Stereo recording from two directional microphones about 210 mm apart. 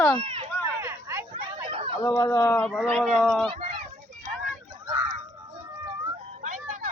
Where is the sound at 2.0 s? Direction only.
10° left (ahead or behind).